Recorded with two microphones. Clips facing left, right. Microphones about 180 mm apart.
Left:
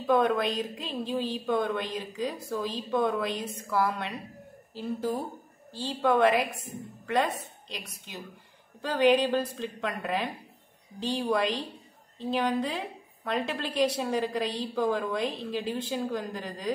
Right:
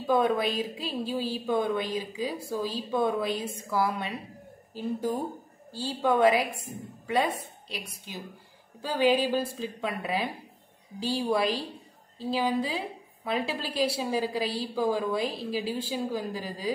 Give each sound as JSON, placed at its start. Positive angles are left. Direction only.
{"t": 0.0, "sound": "a woman's voice", "side_deg": -5}